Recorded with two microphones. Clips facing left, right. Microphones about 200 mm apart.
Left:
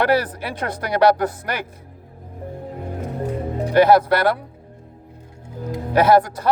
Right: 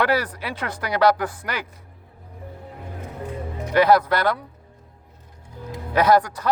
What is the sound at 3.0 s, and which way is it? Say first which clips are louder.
Music: left 6 dB; 45° left (ahead or behind).